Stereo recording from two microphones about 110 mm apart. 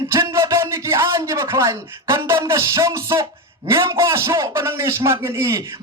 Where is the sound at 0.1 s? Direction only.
25° right (ahead or behind).